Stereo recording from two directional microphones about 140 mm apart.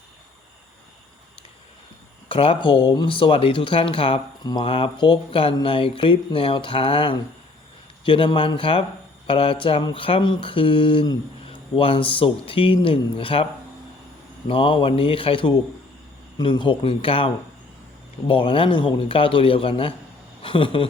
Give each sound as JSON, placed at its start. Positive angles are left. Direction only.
{"t": 2.3, "sound": "speech", "side_deg": 40}